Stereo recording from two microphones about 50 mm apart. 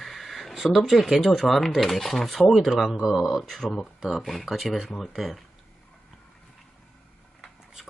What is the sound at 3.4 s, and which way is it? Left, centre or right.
Speech, centre.